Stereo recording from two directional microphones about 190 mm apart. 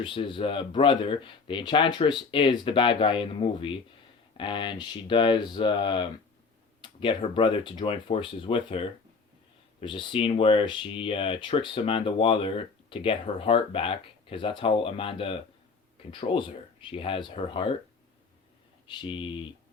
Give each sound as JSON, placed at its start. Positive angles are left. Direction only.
{"t": 0.0, "sound": "speech", "side_deg": 25}
{"t": 18.9, "sound": "speech", "side_deg": 25}